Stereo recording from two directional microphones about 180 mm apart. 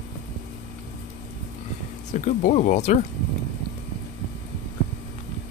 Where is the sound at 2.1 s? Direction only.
40° left (ahead or behind).